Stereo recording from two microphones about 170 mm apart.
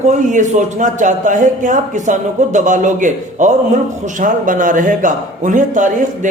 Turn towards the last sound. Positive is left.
turn(degrees=-50)  # may be behind; listen again after turning